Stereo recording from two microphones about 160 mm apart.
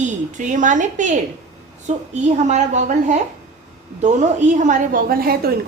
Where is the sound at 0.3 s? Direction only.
50° right (ahead or behind).